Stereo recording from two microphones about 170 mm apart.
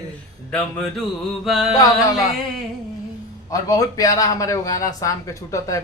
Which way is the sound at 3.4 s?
20° left (ahead or behind).